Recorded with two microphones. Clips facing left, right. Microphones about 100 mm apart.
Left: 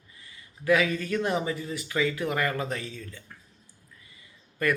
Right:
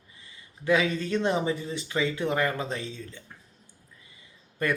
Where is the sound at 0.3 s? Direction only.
25° right (ahead or behind).